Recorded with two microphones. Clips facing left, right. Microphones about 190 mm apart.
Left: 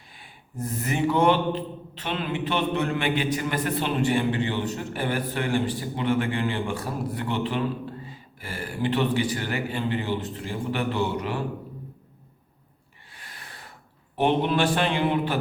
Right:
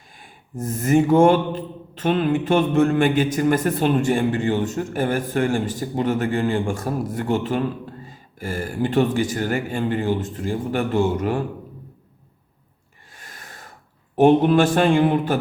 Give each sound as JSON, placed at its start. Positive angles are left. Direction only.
{"t": 0.2, "sound": "speech", "side_deg": -45}
{"t": 13.1, "sound": "snort", "side_deg": -45}
{"t": 14.2, "sound": "speech", "side_deg": -45}